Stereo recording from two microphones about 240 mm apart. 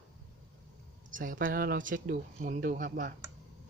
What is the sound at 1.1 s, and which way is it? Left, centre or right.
Speech, right.